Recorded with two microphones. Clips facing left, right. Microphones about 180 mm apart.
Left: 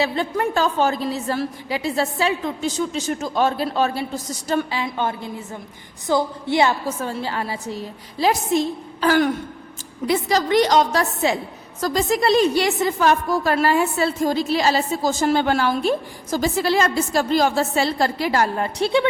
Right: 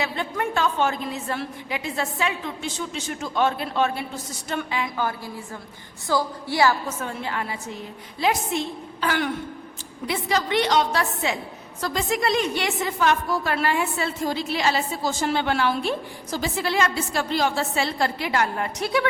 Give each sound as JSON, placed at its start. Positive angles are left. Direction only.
{"t": 0.0, "sound": "a woman's voice", "side_deg": 35}